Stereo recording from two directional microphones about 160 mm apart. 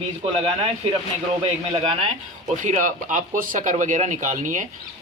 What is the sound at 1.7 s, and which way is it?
Speech, 35° right (ahead or behind).